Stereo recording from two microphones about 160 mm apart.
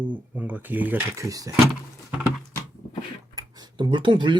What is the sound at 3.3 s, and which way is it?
Tick-tock, 25° right (ahead or behind).